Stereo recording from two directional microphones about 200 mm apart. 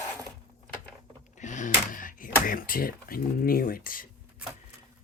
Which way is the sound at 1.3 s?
40° left (ahead or behind).